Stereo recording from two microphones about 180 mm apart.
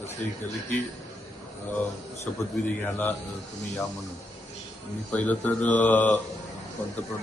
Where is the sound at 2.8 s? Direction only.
10° left (ahead or behind).